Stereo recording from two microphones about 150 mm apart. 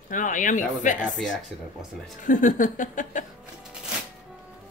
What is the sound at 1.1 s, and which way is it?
Speech, centre (ahead or behind).